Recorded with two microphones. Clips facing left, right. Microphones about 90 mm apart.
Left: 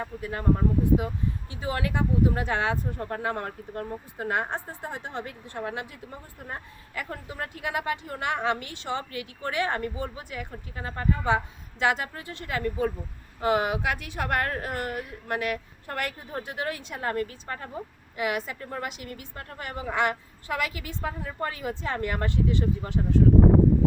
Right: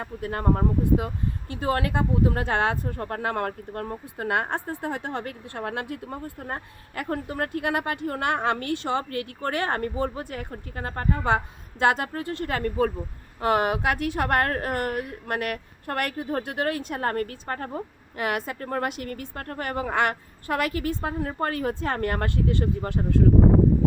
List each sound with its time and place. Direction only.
0.0 s a woman's voice: 55° right (ahead or behind)